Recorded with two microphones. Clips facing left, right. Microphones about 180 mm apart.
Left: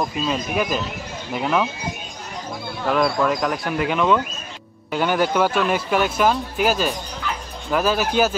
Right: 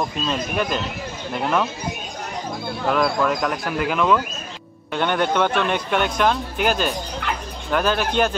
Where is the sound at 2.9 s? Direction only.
Centre (ahead or behind).